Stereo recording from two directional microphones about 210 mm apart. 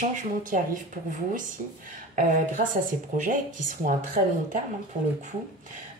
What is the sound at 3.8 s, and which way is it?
Speech, 35° right (ahead or behind).